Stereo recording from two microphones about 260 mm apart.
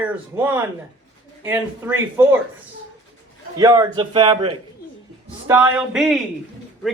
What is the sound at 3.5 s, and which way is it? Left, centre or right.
A man's voice, centre.